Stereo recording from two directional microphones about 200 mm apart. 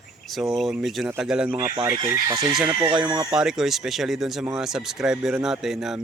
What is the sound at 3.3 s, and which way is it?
Speech, 5° right (ahead or behind).